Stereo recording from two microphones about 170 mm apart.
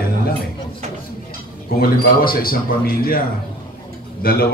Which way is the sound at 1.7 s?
60° left (ahead or behind).